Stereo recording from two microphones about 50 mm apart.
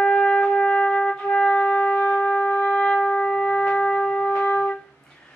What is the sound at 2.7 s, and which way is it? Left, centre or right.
Music, centre.